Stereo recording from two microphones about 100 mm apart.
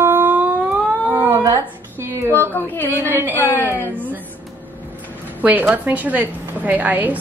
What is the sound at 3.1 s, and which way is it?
Speech, 20° right (ahead or behind).